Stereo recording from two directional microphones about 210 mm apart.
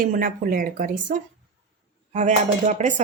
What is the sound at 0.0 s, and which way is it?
Speech, 40° right (ahead or behind).